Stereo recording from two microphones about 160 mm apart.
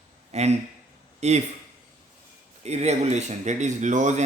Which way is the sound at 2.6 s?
45° right (ahead or behind).